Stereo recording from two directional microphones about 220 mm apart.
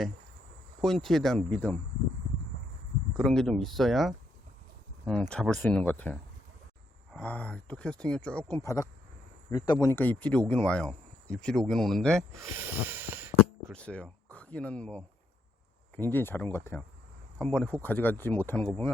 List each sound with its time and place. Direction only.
0.8 s speech: centre (ahead or behind)
3.2 s speech: centre (ahead or behind)
5.3 s speech: 5° left (ahead or behind)
12.4 s a sound: 10° right (ahead or behind)
13.7 s speech: 5° left (ahead or behind)
17.3 s speech: centre (ahead or behind)